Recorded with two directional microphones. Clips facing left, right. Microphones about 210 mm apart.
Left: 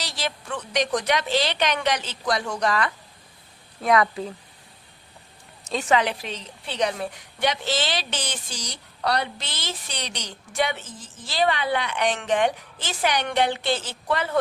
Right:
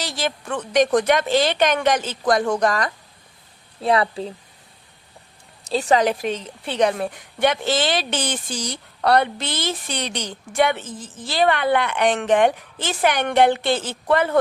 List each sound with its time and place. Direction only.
0.0 s a woman's voice: 50° right (ahead or behind)
3.8 s speech: 30° right (ahead or behind)
5.6 s a woman's voice: 35° right (ahead or behind); by 14.3 s 55° right (ahead or behind)